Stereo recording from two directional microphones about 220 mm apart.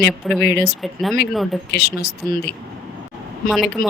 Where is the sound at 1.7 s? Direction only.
45° left (ahead or behind).